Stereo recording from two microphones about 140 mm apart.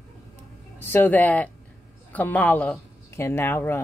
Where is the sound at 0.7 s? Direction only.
15° left (ahead or behind).